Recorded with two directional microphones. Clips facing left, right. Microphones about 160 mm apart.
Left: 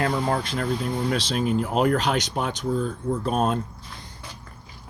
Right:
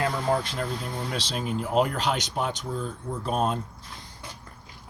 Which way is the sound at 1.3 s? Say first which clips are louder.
Left 4 dB; 65° left (ahead or behind).